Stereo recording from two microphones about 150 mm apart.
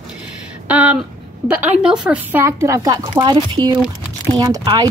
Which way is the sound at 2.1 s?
10° right (ahead or behind).